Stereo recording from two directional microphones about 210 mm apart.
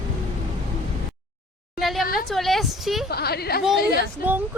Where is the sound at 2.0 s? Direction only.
45° left (ahead or behind).